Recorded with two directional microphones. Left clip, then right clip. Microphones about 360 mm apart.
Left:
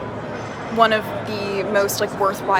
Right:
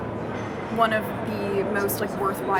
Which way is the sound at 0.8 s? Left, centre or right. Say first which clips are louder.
Left 6 dB; centre.